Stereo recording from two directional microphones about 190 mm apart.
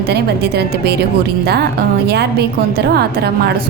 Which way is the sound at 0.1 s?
60° right (ahead or behind).